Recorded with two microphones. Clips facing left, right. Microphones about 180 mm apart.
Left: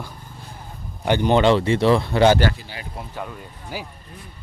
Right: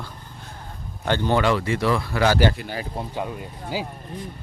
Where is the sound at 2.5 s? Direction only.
60° right (ahead or behind).